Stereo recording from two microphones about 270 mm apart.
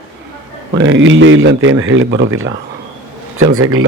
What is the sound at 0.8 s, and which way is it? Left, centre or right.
Speech, right.